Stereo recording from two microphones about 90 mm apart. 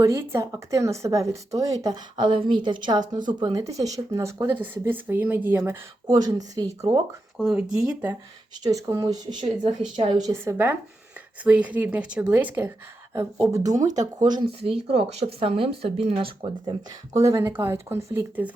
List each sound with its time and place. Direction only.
0.0 s speech: 30° right (ahead or behind); by 3.6 s 55° right (ahead or behind)
3.6 s speech: 40° right (ahead or behind)
4.6 s speech: 25° right (ahead or behind)
6.1 s speech: 50° right (ahead or behind)
7.5 s speech: 10° right (ahead or behind)
8.6 s speech: 40° right (ahead or behind); by 9.7 s 60° right (ahead or behind)
10.3 s speech: 25° right (ahead or behind)
11.4 s speech: 15° right (ahead or behind)
13.5 s speech: 40° right (ahead or behind)
14.6 s speech: 90° right
17.2 s speech: 30° right (ahead or behind)